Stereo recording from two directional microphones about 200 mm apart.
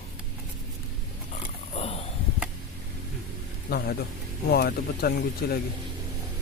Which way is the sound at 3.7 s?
50° left (ahead or behind).